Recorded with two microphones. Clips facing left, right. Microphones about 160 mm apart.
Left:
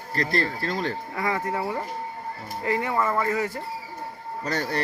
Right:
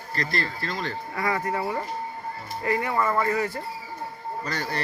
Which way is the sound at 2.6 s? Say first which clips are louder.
Even; 20° left (ahead or behind).